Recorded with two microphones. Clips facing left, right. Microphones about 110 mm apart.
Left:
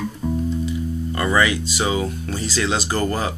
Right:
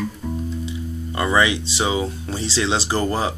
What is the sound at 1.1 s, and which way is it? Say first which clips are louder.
Speech: right 1 dB; 20° right (ahead or behind).